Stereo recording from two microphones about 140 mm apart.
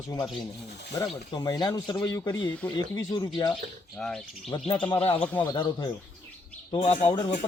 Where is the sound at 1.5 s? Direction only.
30° left (ahead or behind).